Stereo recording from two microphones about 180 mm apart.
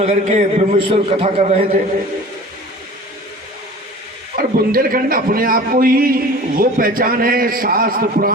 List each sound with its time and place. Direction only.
0.0 s a man's voice: 35° right (ahead or behind)
4.4 s a man's voice: 55° right (ahead or behind)